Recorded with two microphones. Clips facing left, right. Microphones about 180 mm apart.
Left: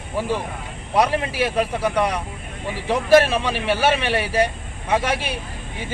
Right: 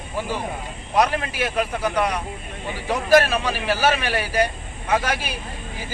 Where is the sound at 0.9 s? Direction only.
30° left (ahead or behind).